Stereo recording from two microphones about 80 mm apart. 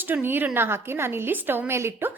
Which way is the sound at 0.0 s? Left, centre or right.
Right.